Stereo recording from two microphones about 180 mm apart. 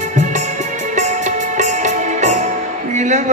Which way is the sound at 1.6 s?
40° right (ahead or behind).